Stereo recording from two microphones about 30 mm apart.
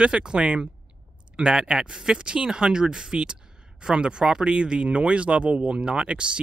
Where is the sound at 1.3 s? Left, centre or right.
Right.